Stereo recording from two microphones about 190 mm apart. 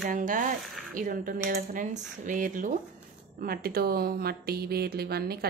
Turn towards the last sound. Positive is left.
turn(degrees=-55)  # may be behind; listen again after turning